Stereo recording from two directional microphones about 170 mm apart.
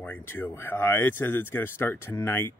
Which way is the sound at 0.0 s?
10° left (ahead or behind).